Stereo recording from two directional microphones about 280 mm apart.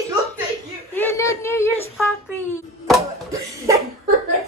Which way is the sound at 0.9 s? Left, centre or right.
Centre.